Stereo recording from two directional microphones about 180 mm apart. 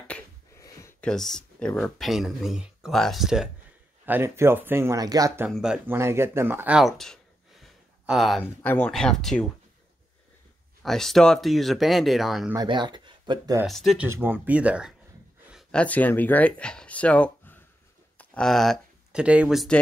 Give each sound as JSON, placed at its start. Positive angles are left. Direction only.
{"t": 0.1, "sound": "a sound", "side_deg": 5}
{"t": 0.6, "sound": "a sound", "side_deg": 15}
{"t": 1.0, "sound": "speech", "side_deg": 5}
{"t": 5.5, "sound": "speech", "side_deg": -5}
{"t": 5.9, "sound": "speech", "side_deg": -15}
{"t": 10.8, "sound": "speech", "side_deg": 0}
{"t": 12.5, "sound": "speech", "side_deg": -25}
{"t": 13.7, "sound": "speech", "side_deg": 0}
{"t": 14.2, "sound": "speech", "side_deg": -10}
{"t": 15.5, "sound": "speech", "side_deg": 5}